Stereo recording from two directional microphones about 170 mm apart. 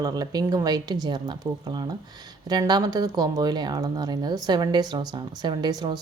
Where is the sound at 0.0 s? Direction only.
20° right (ahead or behind).